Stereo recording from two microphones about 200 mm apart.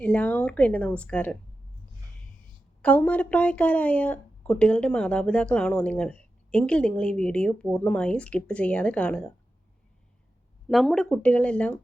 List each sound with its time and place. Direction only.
0.0 s a woman's voice: 5° left (ahead or behind)
2.8 s speech: 5° left (ahead or behind)
10.7 s a woman's voice: centre (ahead or behind)